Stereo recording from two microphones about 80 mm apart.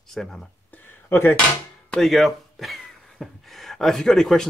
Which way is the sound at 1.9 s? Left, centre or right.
Centre.